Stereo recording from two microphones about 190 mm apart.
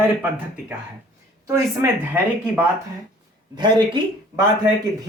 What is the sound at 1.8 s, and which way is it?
Speech, 15° right (ahead or behind).